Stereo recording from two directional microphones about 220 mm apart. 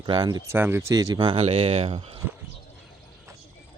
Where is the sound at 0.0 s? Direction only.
20° right (ahead or behind).